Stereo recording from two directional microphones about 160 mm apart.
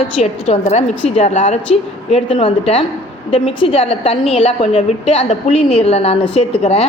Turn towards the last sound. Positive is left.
turn(degrees=40)  # may be behind; listen again after turning